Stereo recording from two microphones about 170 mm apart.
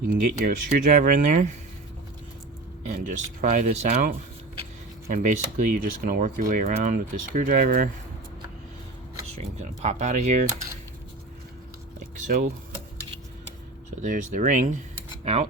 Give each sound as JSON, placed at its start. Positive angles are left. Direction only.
{"t": 0.1, "sound": "speech", "side_deg": -55}
{"t": 2.9, "sound": "speech", "side_deg": -50}
{"t": 5.0, "sound": "speech", "side_deg": -50}
{"t": 9.4, "sound": "speech", "side_deg": -40}
{"t": 11.9, "sound": "a sound", "side_deg": -50}
{"t": 14.0, "sound": "speech", "side_deg": -50}
{"t": 15.2, "sound": "cutlery", "side_deg": -40}